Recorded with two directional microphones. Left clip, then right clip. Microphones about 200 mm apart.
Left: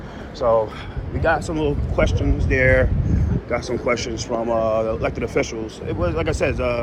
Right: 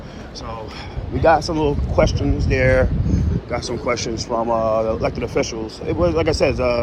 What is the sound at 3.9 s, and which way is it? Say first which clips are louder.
Speech: right 2 dB; 20° right (ahead or behind).